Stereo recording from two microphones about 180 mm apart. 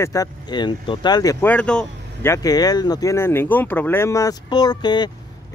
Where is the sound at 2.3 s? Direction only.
20° left (ahead or behind).